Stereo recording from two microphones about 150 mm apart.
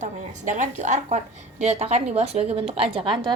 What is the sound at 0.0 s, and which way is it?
A woman's voice, 55° right (ahead or behind).